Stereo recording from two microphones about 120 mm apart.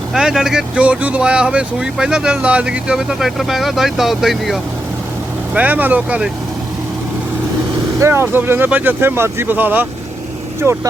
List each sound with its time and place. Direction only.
0.1 s speech: 5° right (ahead or behind)
5.5 s speech: 15° right (ahead or behind)
7.9 s speech: 20° right (ahead or behind)